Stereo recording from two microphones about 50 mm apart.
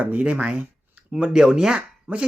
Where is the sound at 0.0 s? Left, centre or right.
Right.